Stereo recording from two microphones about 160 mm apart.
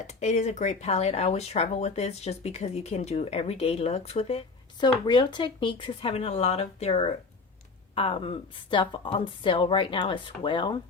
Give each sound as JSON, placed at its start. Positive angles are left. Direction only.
{"t": 0.0, "sound": "speech", "side_deg": 45}
{"t": 4.8, "sound": "a woman's voice", "side_deg": 25}